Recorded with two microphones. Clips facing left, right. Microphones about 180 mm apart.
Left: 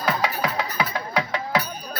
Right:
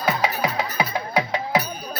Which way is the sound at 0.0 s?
25° right (ahead or behind).